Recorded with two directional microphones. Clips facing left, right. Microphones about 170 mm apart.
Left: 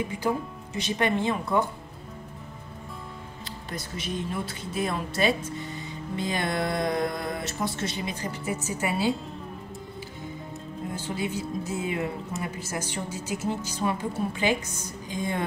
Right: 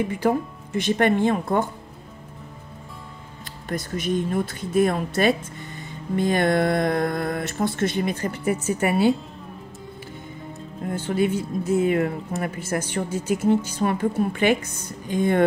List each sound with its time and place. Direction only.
0.7 s speech: 50° right (ahead or behind)
3.4 s speech: 50° right (ahead or behind)
10.9 s speech: 55° right (ahead or behind)